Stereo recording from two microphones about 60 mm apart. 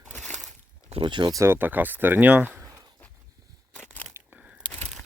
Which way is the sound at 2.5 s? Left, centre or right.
Right.